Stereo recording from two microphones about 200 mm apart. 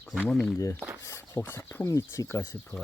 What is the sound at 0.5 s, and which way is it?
Speech, 15° left (ahead or behind).